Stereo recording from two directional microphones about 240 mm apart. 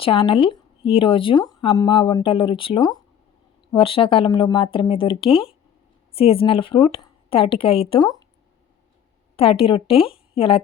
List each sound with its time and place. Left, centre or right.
0.0 s a woman's voice: left
9.3 s a woman's voice: left